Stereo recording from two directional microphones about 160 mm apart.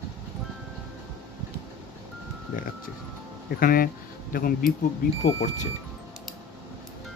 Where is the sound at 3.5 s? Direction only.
65° left (ahead or behind).